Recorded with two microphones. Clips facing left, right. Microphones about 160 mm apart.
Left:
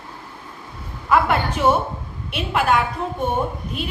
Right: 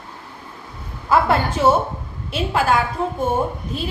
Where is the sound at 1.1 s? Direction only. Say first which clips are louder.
Right 1 dB; 30° right (ahead or behind).